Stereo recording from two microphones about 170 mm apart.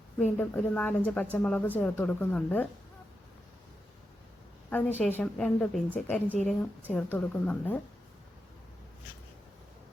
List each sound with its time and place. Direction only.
0.2 s a woman's voice: 10° left (ahead or behind)
4.9 s a woman's voice: 10° left (ahead or behind)